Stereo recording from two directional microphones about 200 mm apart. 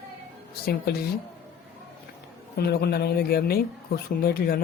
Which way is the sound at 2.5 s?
55° left (ahead or behind).